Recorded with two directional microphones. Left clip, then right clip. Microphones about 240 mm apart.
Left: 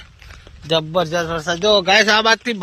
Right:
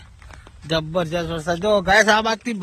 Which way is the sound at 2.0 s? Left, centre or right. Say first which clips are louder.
Left 4 dB; centre.